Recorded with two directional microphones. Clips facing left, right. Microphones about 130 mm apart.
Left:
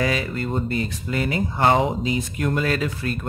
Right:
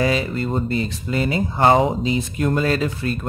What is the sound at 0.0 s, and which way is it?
Speech, 25° right (ahead or behind).